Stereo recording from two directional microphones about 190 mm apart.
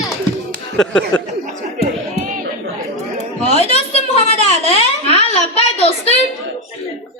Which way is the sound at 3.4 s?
35° left (ahead or behind).